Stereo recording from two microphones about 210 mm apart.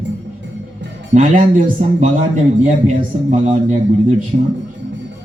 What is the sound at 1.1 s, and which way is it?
A man's voice, 40° right (ahead or behind).